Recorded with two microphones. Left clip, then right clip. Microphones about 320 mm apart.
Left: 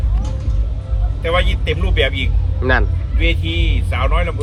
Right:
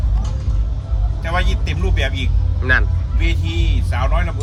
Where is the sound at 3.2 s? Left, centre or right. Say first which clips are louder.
Left 5 dB; right.